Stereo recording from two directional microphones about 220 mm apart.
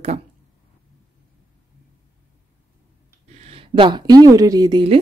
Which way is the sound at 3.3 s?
30° right (ahead or behind).